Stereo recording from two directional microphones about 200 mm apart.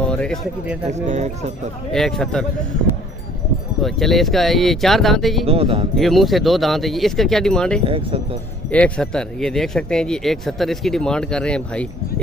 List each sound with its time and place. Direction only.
0.0 s speech: 5° left (ahead or behind)
0.8 s speech: 35° right (ahead or behind)
1.9 s speech: centre (ahead or behind)
3.8 s speech: centre (ahead or behind)
5.5 s speech: 30° right (ahead or behind)
5.9 s speech: centre (ahead or behind)
7.8 s speech: 30° right (ahead or behind)
8.6 s speech: 5° left (ahead or behind)